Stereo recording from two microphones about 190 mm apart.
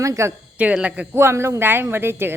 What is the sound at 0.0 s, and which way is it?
Speech, 15° right (ahead or behind).